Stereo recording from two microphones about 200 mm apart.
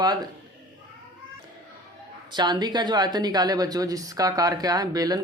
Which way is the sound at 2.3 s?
20° right (ahead or behind).